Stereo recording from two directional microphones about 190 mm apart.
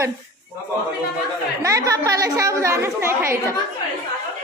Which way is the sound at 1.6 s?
15° right (ahead or behind).